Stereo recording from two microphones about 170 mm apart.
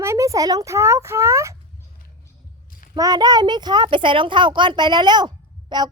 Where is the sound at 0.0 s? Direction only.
15° right (ahead or behind).